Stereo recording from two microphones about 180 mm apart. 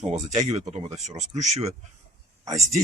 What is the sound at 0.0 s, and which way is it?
Speech, 35° right (ahead or behind).